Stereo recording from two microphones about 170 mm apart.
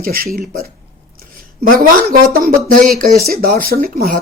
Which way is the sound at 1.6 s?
55° right (ahead or behind).